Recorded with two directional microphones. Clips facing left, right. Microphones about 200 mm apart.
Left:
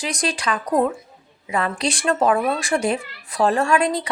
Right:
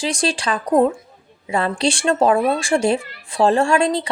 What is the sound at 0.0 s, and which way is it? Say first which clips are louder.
Speech: right 3 dB; 30° right (ahead or behind).